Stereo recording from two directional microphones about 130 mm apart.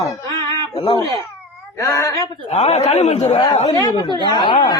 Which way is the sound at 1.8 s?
25° left (ahead or behind).